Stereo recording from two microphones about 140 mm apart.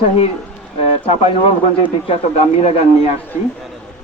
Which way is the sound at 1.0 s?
55° left (ahead or behind).